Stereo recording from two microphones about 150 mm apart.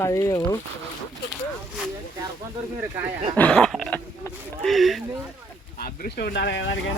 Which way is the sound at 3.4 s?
5° left (ahead or behind).